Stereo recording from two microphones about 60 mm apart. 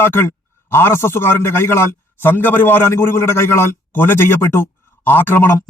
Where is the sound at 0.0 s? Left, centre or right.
Left.